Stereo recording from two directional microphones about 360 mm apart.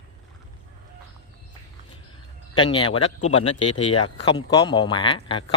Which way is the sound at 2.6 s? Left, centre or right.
Centre.